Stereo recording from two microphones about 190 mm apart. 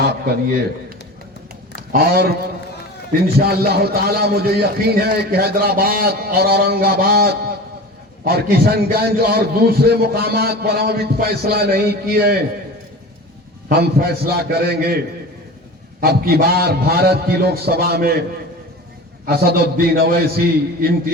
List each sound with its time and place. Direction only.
0.0 s a sound: 60° right (ahead or behind)
1.7 s a man's voice: 55° right (ahead or behind)
13.7 s a man's voice: 55° right (ahead or behind)
16.0 s a man's voice: 55° right (ahead or behind)
19.2 s a man's voice: 55° right (ahead or behind)